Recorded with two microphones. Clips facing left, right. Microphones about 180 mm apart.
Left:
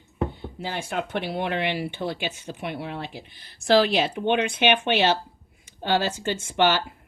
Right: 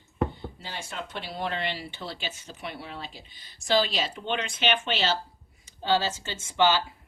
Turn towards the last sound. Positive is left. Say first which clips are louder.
# left 2 dB
turn(degrees=60)  # may be behind; listen again after turning